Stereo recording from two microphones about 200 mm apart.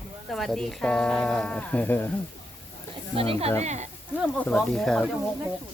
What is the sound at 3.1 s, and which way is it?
Speech, 30° right (ahead or behind).